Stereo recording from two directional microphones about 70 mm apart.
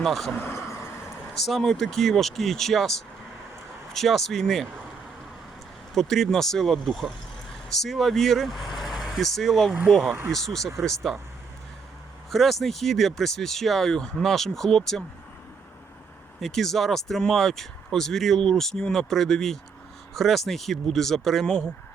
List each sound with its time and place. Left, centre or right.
0.0 s speech: centre
0.5 s vehicle: left
1.5 s speech: centre
3.9 s speech: centre
5.9 s speech: centre
12.3 s speech: centre
16.4 s speech: centre